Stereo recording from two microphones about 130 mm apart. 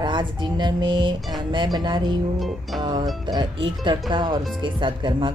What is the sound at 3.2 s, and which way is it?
Speech, 35° right (ahead or behind).